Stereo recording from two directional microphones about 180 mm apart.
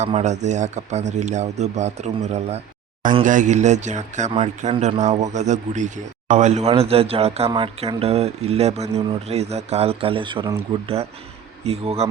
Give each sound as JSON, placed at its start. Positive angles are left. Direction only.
{"t": 0.0, "sound": "a man's voice", "side_deg": -35}